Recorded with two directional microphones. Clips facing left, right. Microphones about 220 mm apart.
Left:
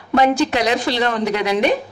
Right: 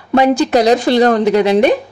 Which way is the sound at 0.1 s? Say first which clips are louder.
Right 5 dB; 40° right (ahead or behind).